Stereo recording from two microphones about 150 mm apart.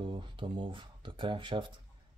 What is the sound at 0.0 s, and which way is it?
Speech, 30° right (ahead or behind).